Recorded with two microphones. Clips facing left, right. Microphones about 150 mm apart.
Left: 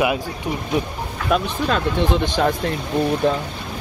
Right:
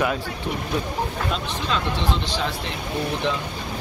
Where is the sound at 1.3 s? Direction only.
55° left (ahead or behind).